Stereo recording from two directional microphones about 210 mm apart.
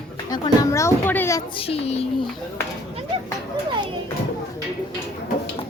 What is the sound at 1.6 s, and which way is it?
Speech, 30° left (ahead or behind).